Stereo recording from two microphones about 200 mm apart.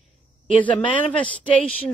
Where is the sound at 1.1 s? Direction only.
5° left (ahead or behind).